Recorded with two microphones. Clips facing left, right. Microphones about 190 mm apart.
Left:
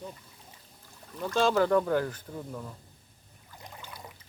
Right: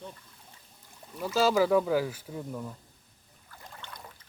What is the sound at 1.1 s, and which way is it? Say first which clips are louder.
Speech: right 1 dB; 5° right (ahead or behind).